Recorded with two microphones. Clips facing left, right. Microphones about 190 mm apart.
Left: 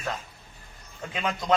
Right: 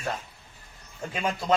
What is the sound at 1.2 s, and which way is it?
Speech, 5° right (ahead or behind).